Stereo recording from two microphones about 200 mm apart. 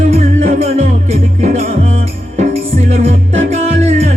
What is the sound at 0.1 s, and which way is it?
Music, 35° right (ahead or behind).